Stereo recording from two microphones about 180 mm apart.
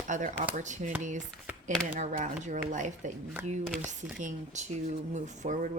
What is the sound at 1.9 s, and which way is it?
Speech, 40° right (ahead or behind).